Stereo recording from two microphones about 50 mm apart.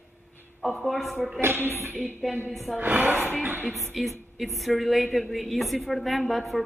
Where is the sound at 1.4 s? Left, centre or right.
Right.